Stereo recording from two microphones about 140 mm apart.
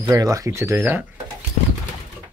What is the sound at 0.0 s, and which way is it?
Speech, 20° right (ahead or behind).